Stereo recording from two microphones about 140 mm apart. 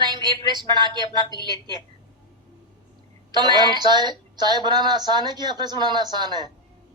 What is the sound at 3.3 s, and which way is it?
Speech, 30° right (ahead or behind).